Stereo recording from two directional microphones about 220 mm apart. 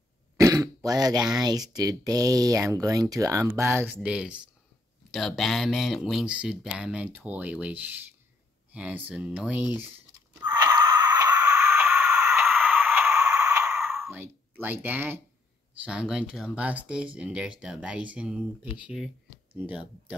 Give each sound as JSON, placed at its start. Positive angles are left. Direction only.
{"t": 0.4, "sound": "speech", "side_deg": -15}
{"t": 10.4, "sound": "a sound", "side_deg": -20}
{"t": 15.8, "sound": "speech", "side_deg": -5}